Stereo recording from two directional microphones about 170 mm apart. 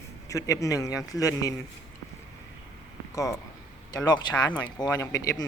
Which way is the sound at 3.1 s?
20° left (ahead or behind).